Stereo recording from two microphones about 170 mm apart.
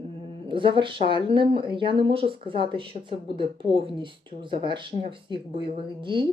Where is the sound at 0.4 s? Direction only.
30° right (ahead or behind).